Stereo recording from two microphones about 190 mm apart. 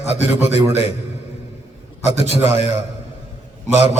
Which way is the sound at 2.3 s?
35° left (ahead or behind).